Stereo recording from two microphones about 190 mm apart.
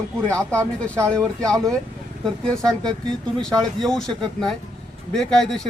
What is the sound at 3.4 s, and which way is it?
Speech, centre (ahead or behind).